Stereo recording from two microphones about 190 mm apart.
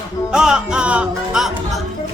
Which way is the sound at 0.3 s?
5° right (ahead or behind).